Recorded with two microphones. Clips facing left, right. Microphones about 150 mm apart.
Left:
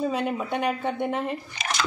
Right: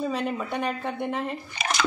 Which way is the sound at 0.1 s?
5° left (ahead or behind).